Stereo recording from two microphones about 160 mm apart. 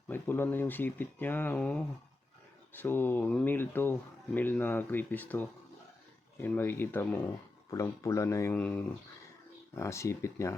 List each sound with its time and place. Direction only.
0.1 s speech: 10° left (ahead or behind)